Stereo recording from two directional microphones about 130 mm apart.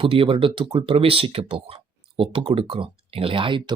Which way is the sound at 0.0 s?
45° right (ahead or behind).